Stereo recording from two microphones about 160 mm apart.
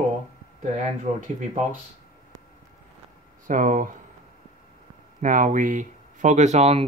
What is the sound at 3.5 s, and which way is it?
Speech, 55° right (ahead or behind).